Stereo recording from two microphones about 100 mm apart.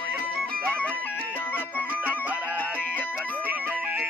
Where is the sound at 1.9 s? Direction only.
15° right (ahead or behind).